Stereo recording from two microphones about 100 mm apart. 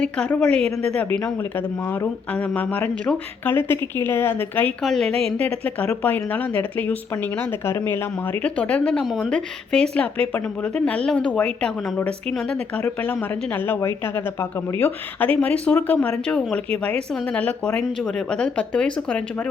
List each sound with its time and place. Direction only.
0.0 s speech: 10° left (ahead or behind)
1.2 s speech: 25° left (ahead or behind)
4.8 s a woman's voice: 5° left (ahead or behind)
5.4 s speech: 15° left (ahead or behind)
15.4 s speech: 15° left (ahead or behind)